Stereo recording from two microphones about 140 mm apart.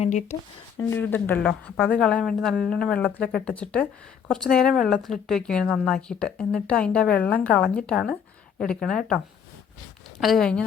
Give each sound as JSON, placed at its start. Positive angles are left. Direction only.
{"t": 0.0, "sound": "speech", "side_deg": 60}
{"t": 0.8, "sound": "a woman's voice", "side_deg": 15}